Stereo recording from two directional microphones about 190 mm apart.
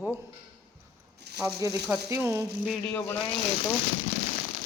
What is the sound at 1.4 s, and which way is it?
Speech, 15° right (ahead or behind).